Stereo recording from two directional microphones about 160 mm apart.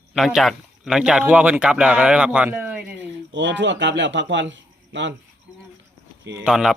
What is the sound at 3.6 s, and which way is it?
Speech, 90° right.